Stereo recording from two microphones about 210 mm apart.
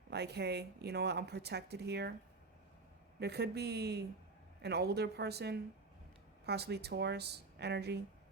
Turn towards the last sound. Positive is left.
turn(degrees=-50)  # may be behind; listen again after turning